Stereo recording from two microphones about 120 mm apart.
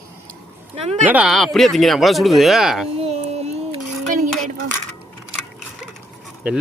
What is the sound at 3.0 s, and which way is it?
Child singing, 60° right (ahead or behind).